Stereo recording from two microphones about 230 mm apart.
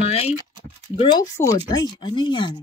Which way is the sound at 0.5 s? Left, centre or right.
Right.